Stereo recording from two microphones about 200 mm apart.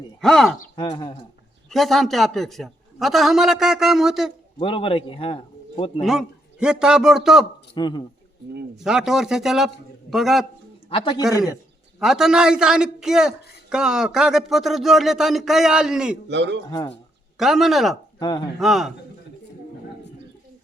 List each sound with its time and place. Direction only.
0.2 s a man's voice: centre (ahead or behind)
0.8 s a man's voice: 20° left (ahead or behind)
1.7 s a man's voice: centre (ahead or behind)
4.6 s a man's voice: 25° left (ahead or behind)
6.0 s a man's voice: centre (ahead or behind)
7.8 s a man's voice: 20° left (ahead or behind)
8.8 s a man's voice: centre (ahead or behind)
10.8 s a man's voice: 25° left (ahead or behind)
11.9 s a man's voice: centre (ahead or behind)
16.3 s a man's voice: 60° right (ahead or behind)
16.6 s a man's voice: 20° left (ahead or behind)
17.3 s a man's voice: centre (ahead or behind)
18.2 s speech: 20° left (ahead or behind)
18.6 s a man's voice: centre (ahead or behind)